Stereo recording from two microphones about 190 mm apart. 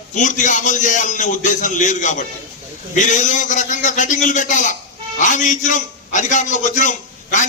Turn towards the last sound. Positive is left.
turn(degrees=40)  # may be behind; listen again after turning